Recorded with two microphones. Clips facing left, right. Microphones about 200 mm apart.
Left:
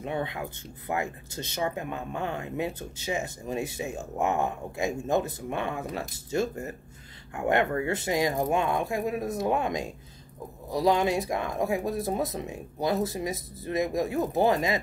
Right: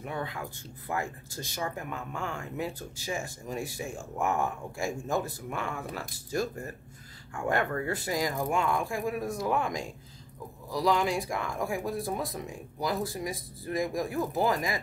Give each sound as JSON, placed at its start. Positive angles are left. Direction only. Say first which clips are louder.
{"t": 0.0, "sound": "speech", "louder": "left 4 dB", "side_deg": 25}